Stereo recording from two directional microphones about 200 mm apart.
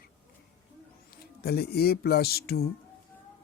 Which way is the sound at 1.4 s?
50° left (ahead or behind).